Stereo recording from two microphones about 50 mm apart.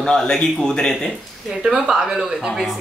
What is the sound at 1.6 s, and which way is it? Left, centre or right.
Speech, centre.